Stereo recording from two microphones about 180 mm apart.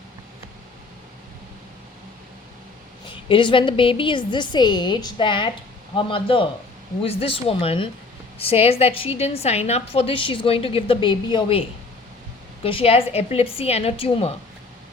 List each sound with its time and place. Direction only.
3.1 s a woman's voice: 25° left (ahead or behind)
12.6 s a woman's voice: 30° left (ahead or behind)